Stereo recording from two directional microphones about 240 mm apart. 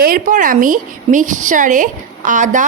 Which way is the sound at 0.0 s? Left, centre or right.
Right.